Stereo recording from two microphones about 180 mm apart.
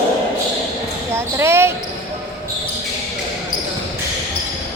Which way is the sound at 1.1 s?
15° right (ahead or behind).